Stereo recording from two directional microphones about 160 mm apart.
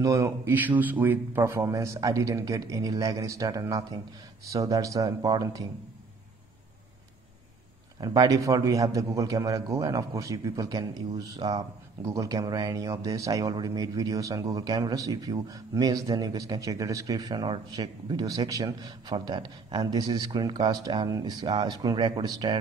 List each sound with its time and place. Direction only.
0.0 s a man's voice: 20° right (ahead or behind)
8.0 s a man's voice: 25° right (ahead or behind)